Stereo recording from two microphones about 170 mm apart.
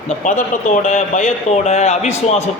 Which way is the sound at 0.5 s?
45° left (ahead or behind).